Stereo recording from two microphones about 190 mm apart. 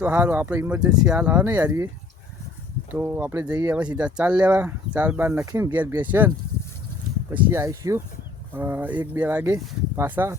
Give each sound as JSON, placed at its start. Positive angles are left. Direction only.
{"t": 0.0, "sound": "speech", "side_deg": -10}
{"t": 2.9, "sound": "speech", "side_deg": -10}